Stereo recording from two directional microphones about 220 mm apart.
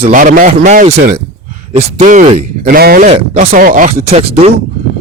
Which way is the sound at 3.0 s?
30° right (ahead or behind).